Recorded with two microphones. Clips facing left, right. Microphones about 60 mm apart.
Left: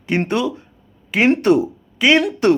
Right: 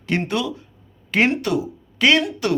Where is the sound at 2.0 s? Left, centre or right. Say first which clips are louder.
Left 2 dB; centre.